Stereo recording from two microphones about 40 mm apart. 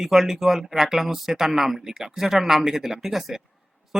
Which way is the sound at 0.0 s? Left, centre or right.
Centre.